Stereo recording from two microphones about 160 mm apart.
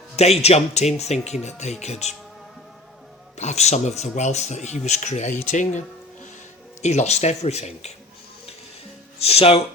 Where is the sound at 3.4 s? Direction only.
45° left (ahead or behind).